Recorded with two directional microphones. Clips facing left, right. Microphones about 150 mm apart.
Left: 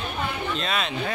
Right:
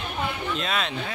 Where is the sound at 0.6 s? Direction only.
Centre (ahead or behind).